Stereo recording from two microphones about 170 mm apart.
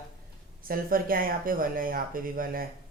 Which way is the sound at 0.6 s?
55° right (ahead or behind).